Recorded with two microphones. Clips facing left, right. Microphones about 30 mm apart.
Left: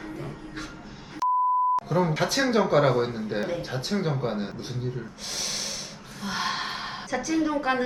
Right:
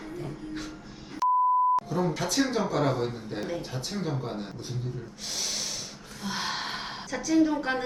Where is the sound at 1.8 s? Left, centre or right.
Left.